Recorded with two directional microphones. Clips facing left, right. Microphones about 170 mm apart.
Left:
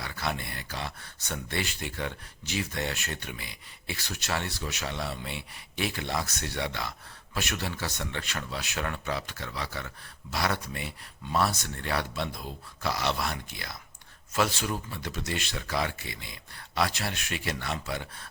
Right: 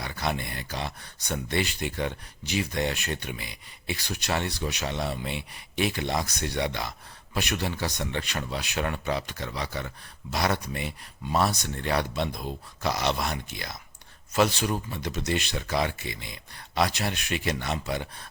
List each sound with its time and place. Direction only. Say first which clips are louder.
0.0 s speech: right 3 dB; 20° right (ahead or behind)